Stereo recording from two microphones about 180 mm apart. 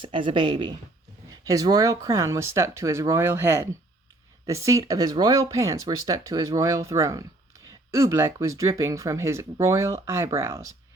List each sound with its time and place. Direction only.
0.0 s speech: 30° right (ahead or behind)